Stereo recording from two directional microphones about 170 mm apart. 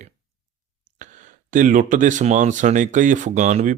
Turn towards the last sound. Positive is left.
turn(degrees=-45)  # may be behind; listen again after turning